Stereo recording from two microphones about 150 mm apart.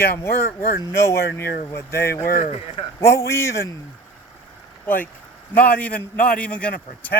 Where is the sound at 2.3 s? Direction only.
65° left (ahead or behind).